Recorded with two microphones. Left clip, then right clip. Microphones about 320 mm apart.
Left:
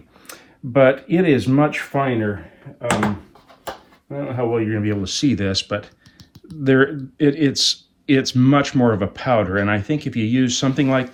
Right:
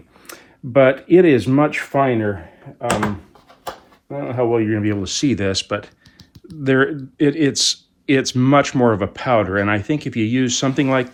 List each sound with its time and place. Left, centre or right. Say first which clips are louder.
0.3 s speech: even; right
4.1 s speech: right 3 dB; centre